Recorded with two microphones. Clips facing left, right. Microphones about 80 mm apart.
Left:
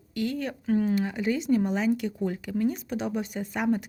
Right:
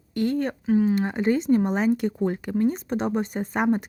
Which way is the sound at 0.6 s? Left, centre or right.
Centre.